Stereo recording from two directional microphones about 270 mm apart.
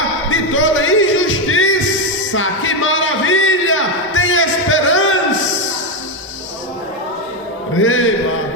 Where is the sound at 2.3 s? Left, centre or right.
Left.